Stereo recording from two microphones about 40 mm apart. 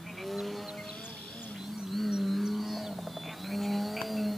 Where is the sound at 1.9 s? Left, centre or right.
Centre.